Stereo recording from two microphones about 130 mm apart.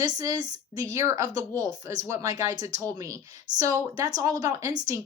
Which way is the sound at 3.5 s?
70° right (ahead or behind).